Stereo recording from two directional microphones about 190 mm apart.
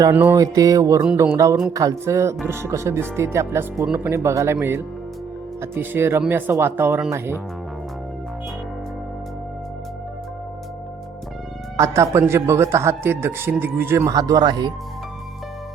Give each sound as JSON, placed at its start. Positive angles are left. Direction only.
{"t": 0.0, "sound": "a man's voice", "side_deg": -10}
{"t": 11.8, "sound": "a man's voice", "side_deg": -15}